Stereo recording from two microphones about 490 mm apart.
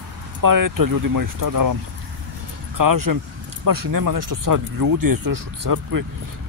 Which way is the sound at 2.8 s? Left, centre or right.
Right.